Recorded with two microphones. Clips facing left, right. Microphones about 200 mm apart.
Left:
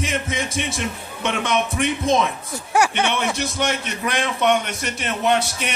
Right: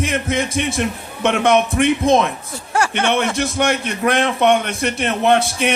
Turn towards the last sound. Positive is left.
turn(degrees=-55)  # may be behind; listen again after turning